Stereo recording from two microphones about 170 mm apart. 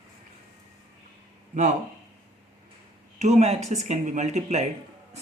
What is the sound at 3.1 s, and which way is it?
Speech, 40° right (ahead or behind).